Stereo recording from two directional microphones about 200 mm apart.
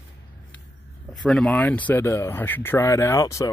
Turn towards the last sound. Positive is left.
turn(degrees=15)  # may be behind; listen again after turning